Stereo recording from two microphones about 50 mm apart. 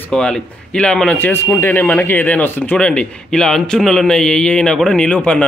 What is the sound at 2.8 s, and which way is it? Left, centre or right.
Speech, centre.